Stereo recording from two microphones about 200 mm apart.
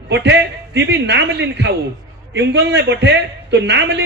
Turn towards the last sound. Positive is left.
turn(degrees=-60)  # may be behind; listen again after turning